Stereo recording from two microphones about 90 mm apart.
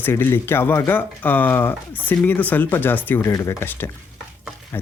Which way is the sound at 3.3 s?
35° left (ahead or behind).